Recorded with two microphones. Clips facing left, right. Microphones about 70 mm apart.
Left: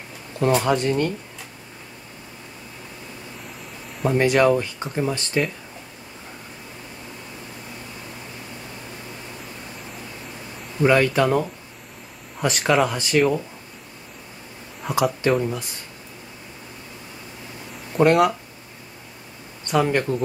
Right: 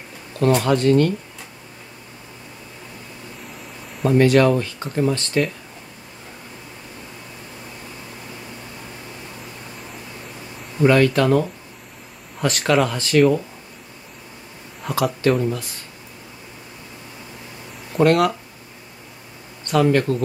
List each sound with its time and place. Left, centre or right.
0.3 s a sound: centre
0.7 s speech: centre
4.2 s speech: centre
10.8 s speech: centre
14.8 s speech: centre
15.2 s speech: centre
17.9 s speech: centre
19.7 s speech: centre